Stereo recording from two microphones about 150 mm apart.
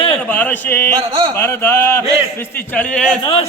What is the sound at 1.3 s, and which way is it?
A man's voice, 15° left (ahead or behind).